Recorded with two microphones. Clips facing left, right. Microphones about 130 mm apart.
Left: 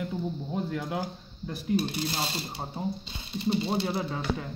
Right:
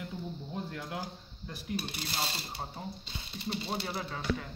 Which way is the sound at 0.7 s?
90° left.